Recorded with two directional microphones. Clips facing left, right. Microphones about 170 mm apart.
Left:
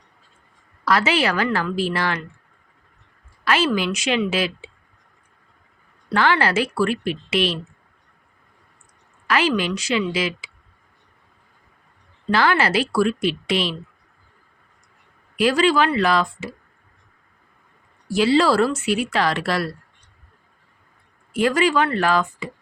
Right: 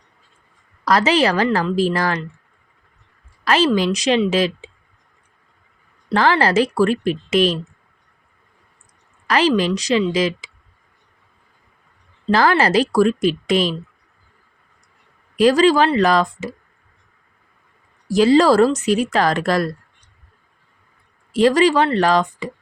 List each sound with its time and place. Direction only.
0.9 s speech: 40° right (ahead or behind)
3.4 s a woman's voice: 40° right (ahead or behind)
6.1 s speech: 40° right (ahead or behind)
9.2 s speech: 35° right (ahead or behind)
12.3 s speech: 40° right (ahead or behind)
15.4 s speech: 40° right (ahead or behind)
18.1 s speech: 40° right (ahead or behind)
21.3 s speech: 35° right (ahead or behind)